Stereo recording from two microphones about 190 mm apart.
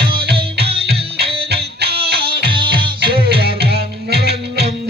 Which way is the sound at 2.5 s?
25° right (ahead or behind).